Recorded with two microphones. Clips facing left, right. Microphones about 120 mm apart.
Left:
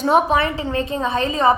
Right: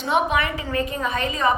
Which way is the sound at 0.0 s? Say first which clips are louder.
Left 5 dB; 35° left (ahead or behind).